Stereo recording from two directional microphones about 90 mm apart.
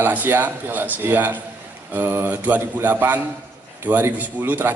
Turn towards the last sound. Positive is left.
turn(degrees=-20)  # may be behind; listen again after turning